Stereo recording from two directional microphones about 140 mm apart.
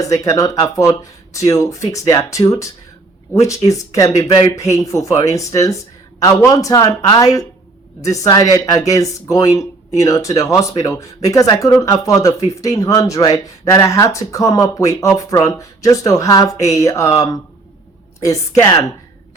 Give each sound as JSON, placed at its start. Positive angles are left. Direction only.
{"t": 0.0, "sound": "speech", "side_deg": 25}
{"t": 18.2, "sound": "speech", "side_deg": 25}